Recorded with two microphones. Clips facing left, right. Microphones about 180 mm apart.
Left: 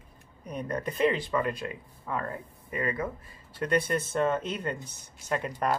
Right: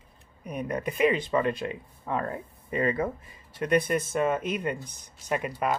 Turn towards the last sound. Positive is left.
turn(degrees=-10)  # may be behind; listen again after turning